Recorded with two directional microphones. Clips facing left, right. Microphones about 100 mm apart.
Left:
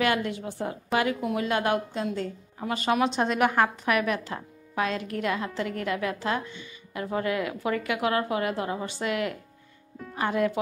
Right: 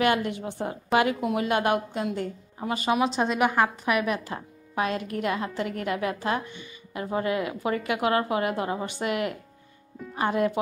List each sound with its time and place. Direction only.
0.0 s a woman's voice: 20° right (ahead or behind)